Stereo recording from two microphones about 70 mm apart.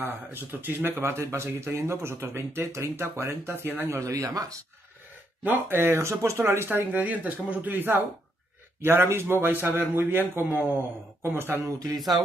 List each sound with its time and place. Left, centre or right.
0.0 s speech: right
4.0 s speech: right
5.4 s speech: right